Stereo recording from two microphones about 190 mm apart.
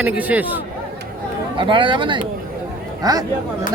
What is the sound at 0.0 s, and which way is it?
Speech, 10° right (ahead or behind).